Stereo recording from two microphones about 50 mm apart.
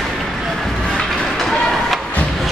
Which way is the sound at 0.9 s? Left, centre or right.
Centre.